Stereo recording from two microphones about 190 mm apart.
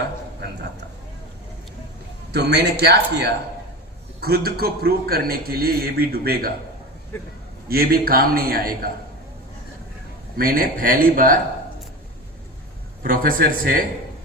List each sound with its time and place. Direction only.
2.3 s a man's voice: 60° right (ahead or behind)
7.1 s a man's voice: 15° left (ahead or behind)
7.7 s a man's voice: 50° right (ahead or behind)
10.3 s a man's voice: 50° right (ahead or behind)
13.0 s a man's voice: 45° right (ahead or behind)